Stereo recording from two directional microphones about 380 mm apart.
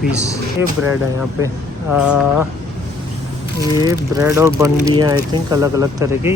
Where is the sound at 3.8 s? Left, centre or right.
Centre.